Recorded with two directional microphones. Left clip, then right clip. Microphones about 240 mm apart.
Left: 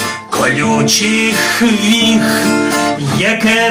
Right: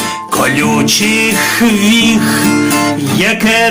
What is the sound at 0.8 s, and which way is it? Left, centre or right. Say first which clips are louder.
Music: right 2 dB; right.